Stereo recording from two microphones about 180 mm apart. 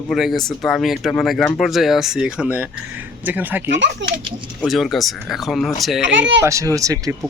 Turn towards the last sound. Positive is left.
turn(degrees=-20)  # may be behind; listen again after turning